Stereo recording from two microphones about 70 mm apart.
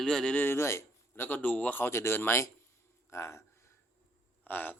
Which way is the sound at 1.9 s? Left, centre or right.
Left.